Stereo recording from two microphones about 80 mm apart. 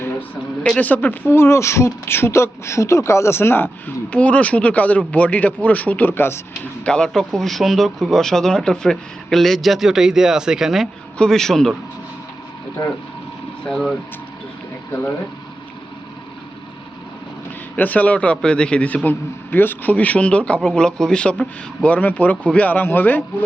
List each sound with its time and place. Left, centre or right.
0.6 s speech: centre
1.3 s speech: left
6.8 s speech: centre
11.2 s a man's voice: centre
13.7 s speech: centre
17.7 s a man's voice: left